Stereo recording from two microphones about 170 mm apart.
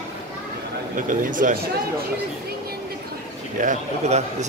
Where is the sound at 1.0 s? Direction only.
50° right (ahead or behind).